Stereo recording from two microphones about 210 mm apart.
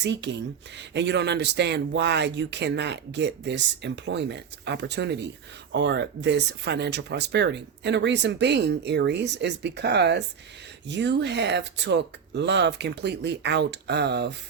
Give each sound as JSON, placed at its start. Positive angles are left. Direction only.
{"t": 0.0, "sound": "speech", "side_deg": -55}